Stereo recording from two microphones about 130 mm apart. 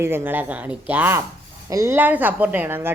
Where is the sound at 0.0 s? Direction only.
20° right (ahead or behind).